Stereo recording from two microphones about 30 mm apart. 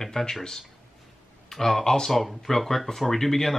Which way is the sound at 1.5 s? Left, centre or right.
Centre.